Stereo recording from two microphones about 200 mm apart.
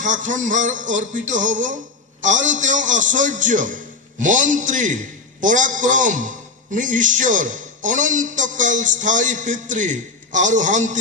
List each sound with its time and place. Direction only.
0.0 s a man's voice: 40° right (ahead or behind)